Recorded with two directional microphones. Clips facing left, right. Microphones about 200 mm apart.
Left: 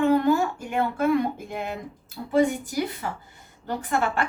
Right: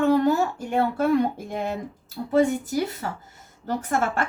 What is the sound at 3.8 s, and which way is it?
Speech, 45° right (ahead or behind).